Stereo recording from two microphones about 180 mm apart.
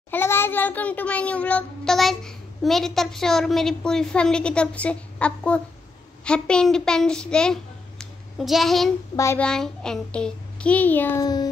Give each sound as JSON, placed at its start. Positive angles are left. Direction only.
{"t": 0.1, "sound": "child singing", "side_deg": 15}
{"t": 6.2, "sound": "a child's voice", "side_deg": 5}
{"t": 9.1, "sound": "a child's voice", "side_deg": 15}
{"t": 9.4, "sound": "child singing", "side_deg": 5}